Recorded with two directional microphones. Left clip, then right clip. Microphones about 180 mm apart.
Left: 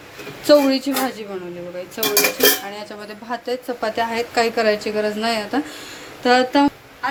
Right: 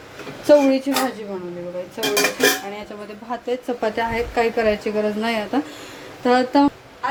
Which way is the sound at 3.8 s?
20° right (ahead or behind).